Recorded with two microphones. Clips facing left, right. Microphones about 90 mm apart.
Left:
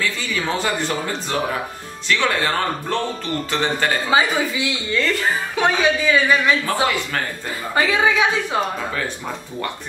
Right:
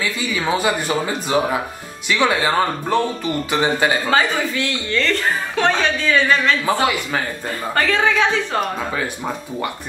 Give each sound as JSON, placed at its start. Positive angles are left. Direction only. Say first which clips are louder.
{"t": 0.0, "sound": "speech", "louder": "right 2 dB", "side_deg": -10}
{"t": 4.1, "sound": "a woman's voice", "louder": "even", "side_deg": 10}
{"t": 6.8, "sound": "speech", "louder": "right 1 dB", "side_deg": -5}
{"t": 7.7, "sound": "a woman's voice", "louder": "even", "side_deg": 10}